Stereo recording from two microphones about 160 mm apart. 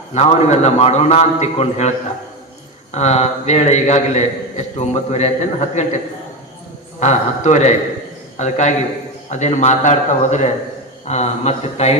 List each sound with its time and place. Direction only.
0.1 s a man's voice: 45° left (ahead or behind)
2.9 s a man's voice: 45° left (ahead or behind)
7.0 s a man's voice: 45° left (ahead or behind)